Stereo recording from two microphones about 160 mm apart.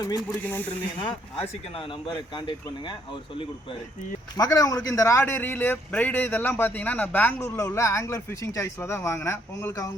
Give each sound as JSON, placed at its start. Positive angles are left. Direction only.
{"t": 0.2, "sound": "a man's voice", "side_deg": 5}
{"t": 1.4, "sound": "speech", "side_deg": 35}
{"t": 4.4, "sound": "a man's voice", "side_deg": 20}